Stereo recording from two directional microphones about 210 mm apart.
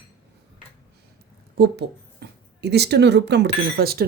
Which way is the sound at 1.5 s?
50° right (ahead or behind).